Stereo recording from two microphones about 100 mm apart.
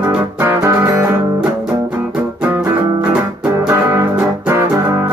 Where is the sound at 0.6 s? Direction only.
30° right (ahead or behind).